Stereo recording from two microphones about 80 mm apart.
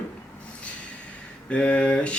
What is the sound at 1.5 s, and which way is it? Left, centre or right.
Speech, centre.